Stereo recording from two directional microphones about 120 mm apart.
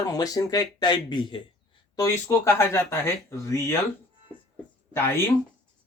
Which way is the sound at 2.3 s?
20° left (ahead or behind).